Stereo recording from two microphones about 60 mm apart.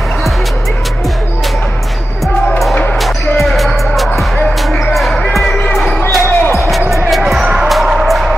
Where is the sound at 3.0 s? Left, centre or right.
Centre.